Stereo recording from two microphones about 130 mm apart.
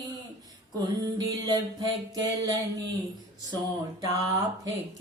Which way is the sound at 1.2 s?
25° right (ahead or behind).